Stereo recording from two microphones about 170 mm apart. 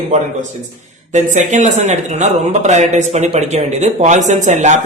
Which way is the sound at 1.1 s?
45° right (ahead or behind).